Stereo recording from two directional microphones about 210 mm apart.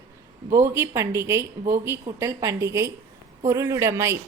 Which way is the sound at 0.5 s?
10° right (ahead or behind).